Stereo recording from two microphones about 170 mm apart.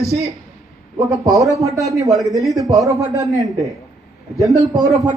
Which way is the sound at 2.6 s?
20° right (ahead or behind).